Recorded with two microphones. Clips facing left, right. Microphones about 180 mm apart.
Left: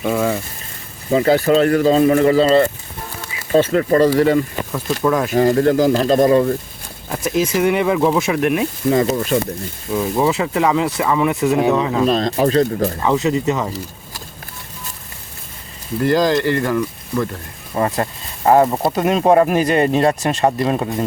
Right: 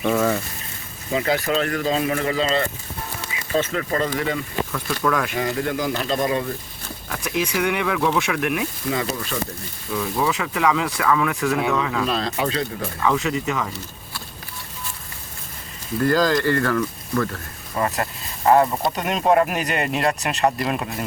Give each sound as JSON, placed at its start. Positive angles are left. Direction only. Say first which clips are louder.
{"t": 0.0, "sound": "speech", "louder": "left 2 dB", "side_deg": 10}
{"t": 1.1, "sound": "speech", "louder": "left 8 dB", "side_deg": 35}
{"t": 3.5, "sound": "speech", "louder": "left 9 dB", "side_deg": 40}
{"t": 4.7, "sound": "speech", "louder": "left 6 dB", "side_deg": 20}
{"t": 7.1, "sound": "speech", "louder": "left 6 dB", "side_deg": 30}
{"t": 9.9, "sound": "speech", "louder": "left 6 dB", "side_deg": 25}
{"t": 13.7, "sound": "speech", "louder": "left 6 dB", "side_deg": 35}
{"t": 16.0, "sound": "speech", "louder": "left 3 dB", "side_deg": 20}
{"t": 17.7, "sound": "speech", "louder": "left 5 dB", "side_deg": 30}